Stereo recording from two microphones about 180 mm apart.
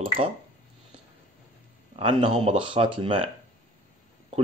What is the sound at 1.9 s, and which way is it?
Speech, 30° right (ahead or behind).